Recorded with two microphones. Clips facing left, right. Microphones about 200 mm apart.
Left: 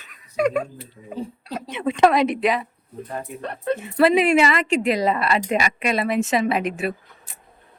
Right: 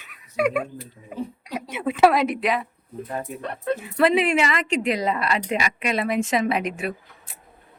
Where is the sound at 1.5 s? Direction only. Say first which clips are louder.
Left 1 dB; 5° right (ahead or behind).